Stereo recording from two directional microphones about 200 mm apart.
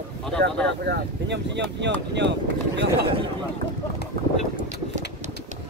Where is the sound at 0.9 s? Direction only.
60° right (ahead or behind).